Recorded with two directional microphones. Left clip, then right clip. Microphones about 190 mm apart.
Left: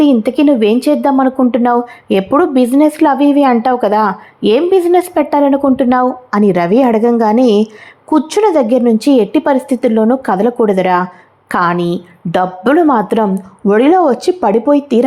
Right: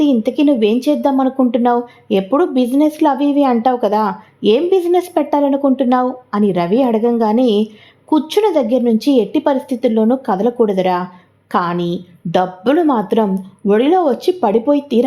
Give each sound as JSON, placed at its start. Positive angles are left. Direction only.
{"t": 0.0, "sound": "speech", "side_deg": 15}